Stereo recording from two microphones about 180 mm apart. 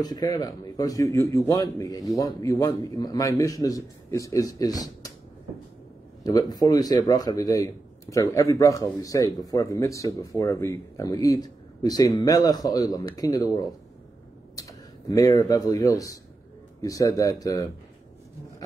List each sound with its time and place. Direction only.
0.0 s a man's voice: 20° left (ahead or behind)
6.2 s a man's voice: 20° left (ahead or behind)